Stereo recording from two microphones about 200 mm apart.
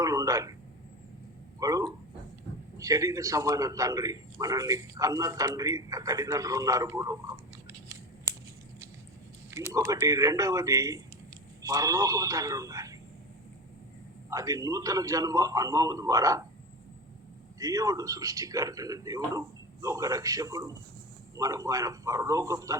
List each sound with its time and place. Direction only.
0.0 s a sound: 15° right (ahead or behind)
1.5 s a sound: 15° right (ahead or behind)
2.7 s a man's voice: 15° right (ahead or behind)
9.5 s a man's voice: 15° right (ahead or behind)
14.3 s a man's voice: 15° right (ahead or behind)
17.6 s a man's voice: 15° right (ahead or behind)